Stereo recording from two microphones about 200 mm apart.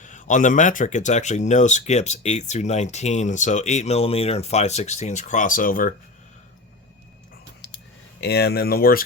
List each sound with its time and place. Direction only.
0.0 s speech: 40° left (ahead or behind)
8.2 s speech: 55° left (ahead or behind)